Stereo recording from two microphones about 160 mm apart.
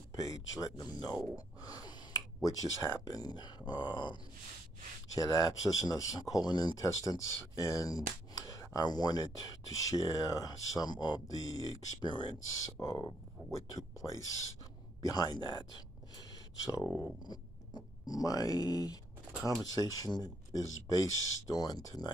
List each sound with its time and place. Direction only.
0.1 s speech: 20° left (ahead or behind)